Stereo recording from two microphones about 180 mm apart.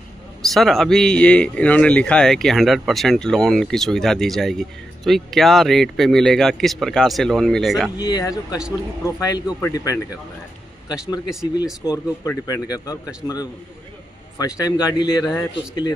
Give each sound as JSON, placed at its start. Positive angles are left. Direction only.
{"t": 0.5, "sound": "speech", "side_deg": 0}
{"t": 8.0, "sound": "a man's voice", "side_deg": 20}
{"t": 11.8, "sound": "a man's voice", "side_deg": 20}